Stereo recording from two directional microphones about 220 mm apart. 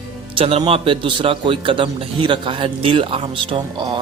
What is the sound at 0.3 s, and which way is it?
A man's voice, 25° right (ahead or behind).